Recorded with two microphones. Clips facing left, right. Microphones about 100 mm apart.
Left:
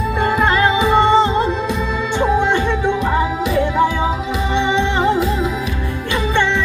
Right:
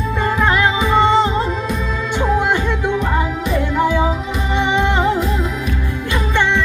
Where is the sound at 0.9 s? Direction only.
15° left (ahead or behind).